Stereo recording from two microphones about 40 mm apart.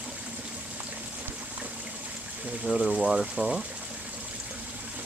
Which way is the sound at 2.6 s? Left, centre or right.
Centre.